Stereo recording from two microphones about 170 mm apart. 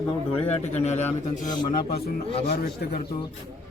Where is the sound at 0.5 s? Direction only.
40° left (ahead or behind).